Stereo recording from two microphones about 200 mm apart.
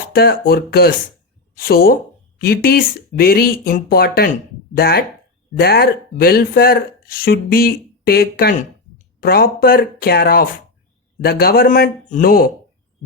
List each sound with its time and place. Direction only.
0.1 s speech: 50° left (ahead or behind)